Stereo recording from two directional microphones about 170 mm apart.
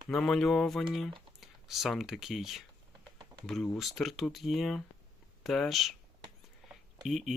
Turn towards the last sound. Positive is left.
turn(degrees=0)  # may be behind; listen again after turning